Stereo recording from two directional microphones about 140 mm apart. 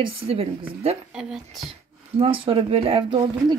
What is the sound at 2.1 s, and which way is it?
Speech, 40° right (ahead or behind).